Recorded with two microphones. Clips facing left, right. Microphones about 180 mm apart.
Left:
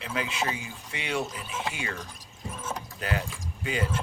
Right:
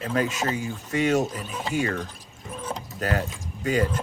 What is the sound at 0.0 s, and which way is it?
Speech, 45° right (ahead or behind).